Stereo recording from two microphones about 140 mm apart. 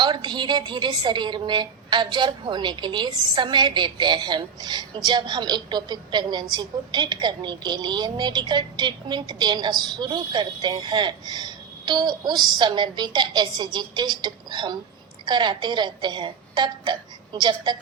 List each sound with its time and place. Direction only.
0.0 s a woman's voice: 35° right (ahead or behind)